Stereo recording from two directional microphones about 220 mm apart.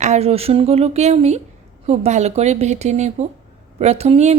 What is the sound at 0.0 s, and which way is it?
Speech, 30° right (ahead or behind).